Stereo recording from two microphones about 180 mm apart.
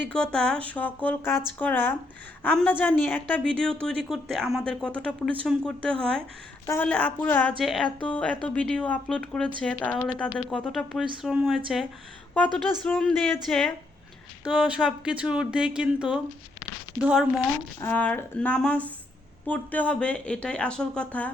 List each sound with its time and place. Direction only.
0.0 s a woman's voice: 5° left (ahead or behind)
17.7 s a woman's voice: 10° left (ahead or behind)